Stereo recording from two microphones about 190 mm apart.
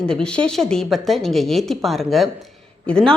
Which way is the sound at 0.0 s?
5° left (ahead or behind).